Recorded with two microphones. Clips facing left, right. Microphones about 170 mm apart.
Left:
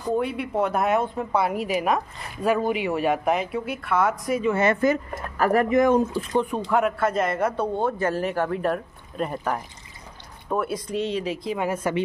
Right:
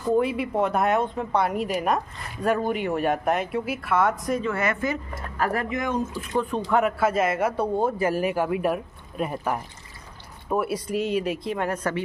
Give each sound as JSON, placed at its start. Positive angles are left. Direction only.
{"t": 0.1, "sound": "speech", "side_deg": 0}
{"t": 4.4, "sound": "a woman's voice", "side_deg": 20}
{"t": 5.4, "sound": "speech", "side_deg": 45}
{"t": 6.3, "sound": "speech", "side_deg": 15}
{"t": 6.7, "sound": "a man's voice", "side_deg": -5}